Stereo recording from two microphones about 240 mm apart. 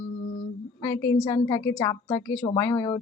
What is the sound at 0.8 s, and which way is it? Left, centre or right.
Speech, centre.